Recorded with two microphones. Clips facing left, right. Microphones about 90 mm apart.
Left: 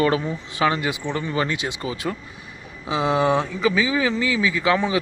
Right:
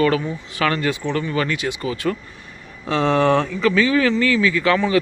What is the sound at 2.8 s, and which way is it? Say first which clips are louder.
Speech: right 3 dB; 5° left (ahead or behind).